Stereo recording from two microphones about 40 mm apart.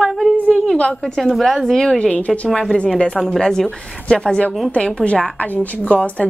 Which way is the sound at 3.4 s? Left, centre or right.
Centre.